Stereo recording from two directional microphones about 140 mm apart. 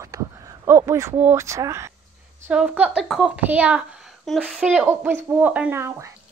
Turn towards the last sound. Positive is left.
turn(degrees=-20)  # may be behind; listen again after turning